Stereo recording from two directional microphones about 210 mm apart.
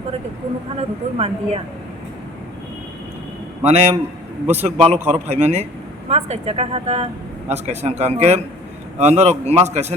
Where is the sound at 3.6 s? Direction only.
30° right (ahead or behind).